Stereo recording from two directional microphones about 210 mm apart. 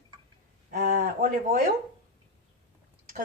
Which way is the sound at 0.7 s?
40° right (ahead or behind).